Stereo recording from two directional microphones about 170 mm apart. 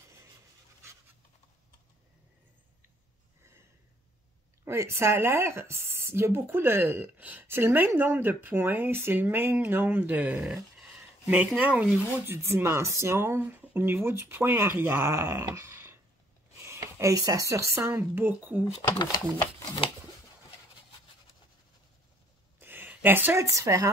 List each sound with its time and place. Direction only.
4.6 s speech: 15° right (ahead or behind)
19.3 s speech: 25° left (ahead or behind)
22.6 s a woman's voice: 10° right (ahead or behind)